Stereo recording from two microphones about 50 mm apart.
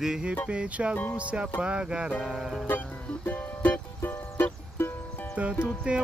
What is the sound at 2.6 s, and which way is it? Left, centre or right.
Music, left.